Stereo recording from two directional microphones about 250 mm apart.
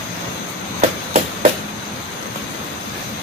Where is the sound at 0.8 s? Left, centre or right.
Right.